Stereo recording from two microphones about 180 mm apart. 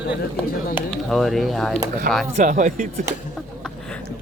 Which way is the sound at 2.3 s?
40° right (ahead or behind).